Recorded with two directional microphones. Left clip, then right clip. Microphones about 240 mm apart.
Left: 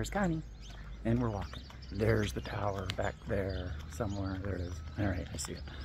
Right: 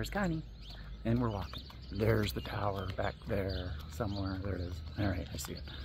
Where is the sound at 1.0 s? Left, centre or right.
Centre.